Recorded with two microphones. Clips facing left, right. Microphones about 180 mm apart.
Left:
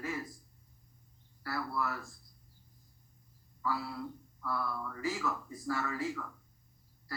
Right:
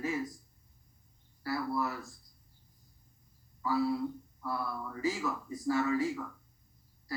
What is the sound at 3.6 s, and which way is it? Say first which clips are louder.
Speech: right 7 dB; 20° right (ahead or behind).